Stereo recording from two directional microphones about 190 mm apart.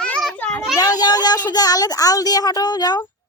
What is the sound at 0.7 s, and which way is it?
A woman's voice, 20° left (ahead or behind).